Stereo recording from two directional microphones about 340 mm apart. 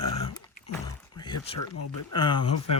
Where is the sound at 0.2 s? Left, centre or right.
Centre.